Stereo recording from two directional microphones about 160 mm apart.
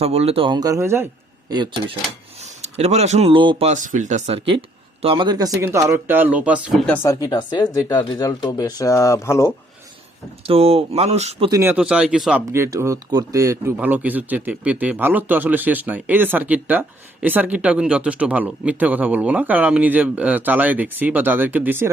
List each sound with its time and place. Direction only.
0.0 s speech: 40° right (ahead or behind); by 1.0 s 15° right (ahead or behind)
1.5 s speech: 25° right (ahead or behind)
2.6 s speech: 40° right (ahead or behind)
3.7 s speech: 50° right (ahead or behind)
5.0 s speech: 30° right (ahead or behind); by 6.7 s 10° right (ahead or behind)
6.8 s speech: 15° left (ahead or behind)
10.4 s speech: 35° right (ahead or behind)
11.6 s speech: 10° right (ahead or behind)
12.5 s speech: 20° right (ahead or behind)